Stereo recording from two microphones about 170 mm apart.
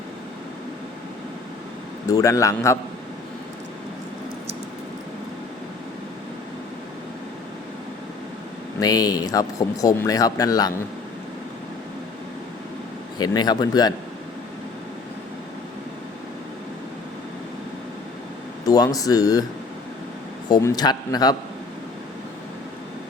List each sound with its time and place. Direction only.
2.0 s speech: 20° left (ahead or behind)
8.8 s speech: 20° left (ahead or behind)
13.1 s speech: 25° left (ahead or behind)
18.6 s speech: 20° left (ahead or behind)
20.5 s speech: 20° left (ahead or behind)